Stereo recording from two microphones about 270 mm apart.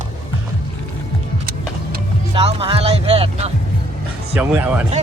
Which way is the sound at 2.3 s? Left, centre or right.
Right.